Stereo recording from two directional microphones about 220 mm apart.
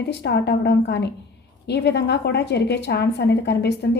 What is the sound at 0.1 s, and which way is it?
A woman's voice, 50° left (ahead or behind).